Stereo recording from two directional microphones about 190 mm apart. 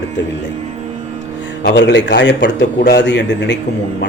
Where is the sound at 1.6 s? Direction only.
65° left (ahead or behind).